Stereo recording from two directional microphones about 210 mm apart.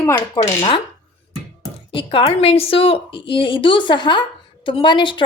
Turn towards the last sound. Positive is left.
turn(degrees=20)  # may be behind; listen again after turning